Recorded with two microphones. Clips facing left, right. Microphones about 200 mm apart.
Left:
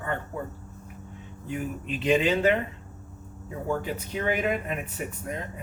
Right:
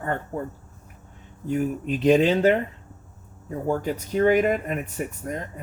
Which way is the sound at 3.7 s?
40° right (ahead or behind).